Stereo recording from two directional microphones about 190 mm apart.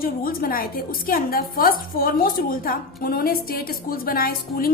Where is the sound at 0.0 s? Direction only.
50° left (ahead or behind).